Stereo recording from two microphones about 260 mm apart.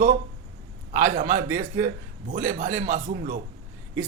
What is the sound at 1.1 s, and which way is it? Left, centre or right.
Speech, right.